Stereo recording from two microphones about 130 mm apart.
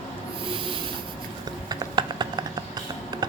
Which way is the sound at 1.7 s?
35° right (ahead or behind).